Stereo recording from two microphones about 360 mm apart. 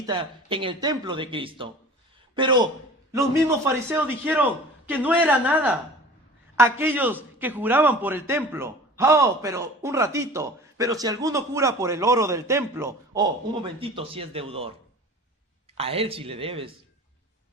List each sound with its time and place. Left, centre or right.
0.0 s a man's voice: centre
15.8 s a man's voice: centre